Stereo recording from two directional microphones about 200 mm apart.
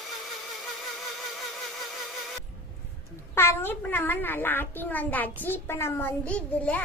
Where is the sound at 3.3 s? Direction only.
10° left (ahead or behind).